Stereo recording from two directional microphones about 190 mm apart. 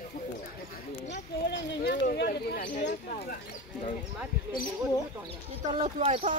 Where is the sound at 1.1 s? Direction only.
65° left (ahead or behind); by 2.8 s 50° left (ahead or behind).